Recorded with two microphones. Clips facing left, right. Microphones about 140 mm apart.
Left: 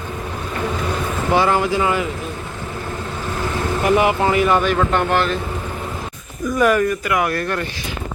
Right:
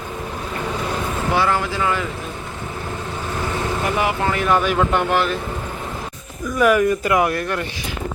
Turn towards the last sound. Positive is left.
turn(degrees=-10)  # may be behind; listen again after turning